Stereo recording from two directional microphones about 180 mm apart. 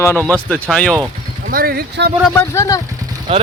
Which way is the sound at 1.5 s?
55° right (ahead or behind).